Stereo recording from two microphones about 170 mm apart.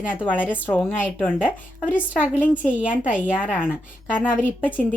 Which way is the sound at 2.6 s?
5° right (ahead or behind).